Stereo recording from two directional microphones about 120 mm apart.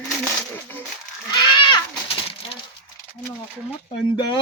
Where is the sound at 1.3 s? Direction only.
40° left (ahead or behind).